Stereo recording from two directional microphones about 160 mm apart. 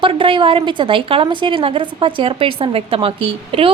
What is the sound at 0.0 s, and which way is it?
A woman's voice, 30° right (ahead or behind).